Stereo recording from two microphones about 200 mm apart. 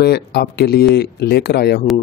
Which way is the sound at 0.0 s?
55° left (ahead or behind).